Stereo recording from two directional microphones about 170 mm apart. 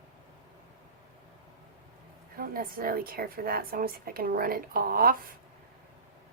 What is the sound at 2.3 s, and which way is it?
A woman's voice, 60° right (ahead or behind).